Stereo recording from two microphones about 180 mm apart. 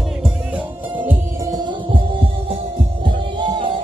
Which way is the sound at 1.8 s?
30° right (ahead or behind).